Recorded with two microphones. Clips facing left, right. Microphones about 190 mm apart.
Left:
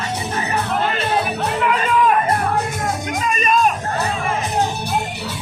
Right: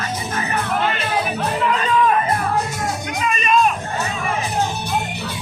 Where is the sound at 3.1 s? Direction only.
45° left (ahead or behind).